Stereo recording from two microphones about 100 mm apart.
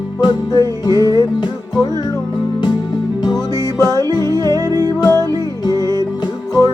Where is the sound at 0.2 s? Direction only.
45° left (ahead or behind).